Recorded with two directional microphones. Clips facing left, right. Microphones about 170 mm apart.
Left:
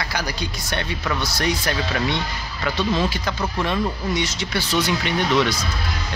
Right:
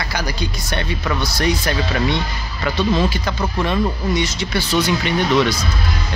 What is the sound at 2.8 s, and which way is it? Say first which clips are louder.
Speech: right 4 dB; 40° right (ahead or behind).